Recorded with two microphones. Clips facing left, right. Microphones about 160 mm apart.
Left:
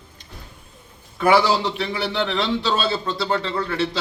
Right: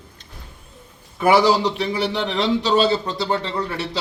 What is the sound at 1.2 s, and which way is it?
A man's voice, 15° right (ahead or behind).